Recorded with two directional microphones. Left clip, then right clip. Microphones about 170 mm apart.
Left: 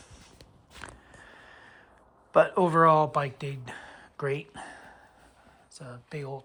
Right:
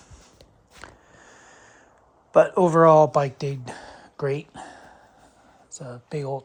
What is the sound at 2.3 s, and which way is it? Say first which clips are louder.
Speech: right 5 dB; 25° right (ahead or behind).